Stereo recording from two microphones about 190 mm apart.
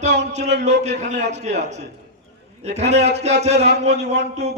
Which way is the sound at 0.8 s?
35° right (ahead or behind).